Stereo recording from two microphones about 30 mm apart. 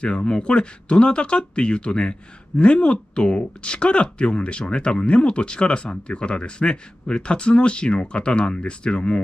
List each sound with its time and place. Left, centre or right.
0.0 s speech: left